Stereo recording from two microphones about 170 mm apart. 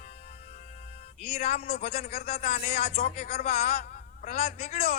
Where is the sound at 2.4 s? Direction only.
45° left (ahead or behind).